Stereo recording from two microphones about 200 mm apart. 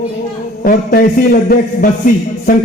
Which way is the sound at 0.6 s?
45° left (ahead or behind).